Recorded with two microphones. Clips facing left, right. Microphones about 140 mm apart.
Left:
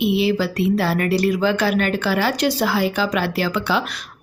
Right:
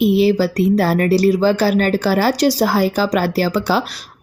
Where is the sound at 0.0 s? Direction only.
40° right (ahead or behind).